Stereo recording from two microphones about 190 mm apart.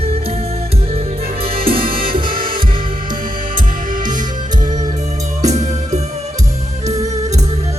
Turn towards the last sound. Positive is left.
turn(degrees=-20)  # may be behind; listen again after turning